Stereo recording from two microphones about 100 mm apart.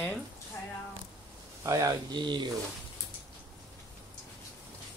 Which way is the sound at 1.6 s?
35° right (ahead or behind).